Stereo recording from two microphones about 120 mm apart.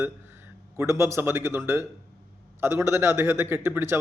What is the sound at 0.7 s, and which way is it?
A man's voice, 25° right (ahead or behind).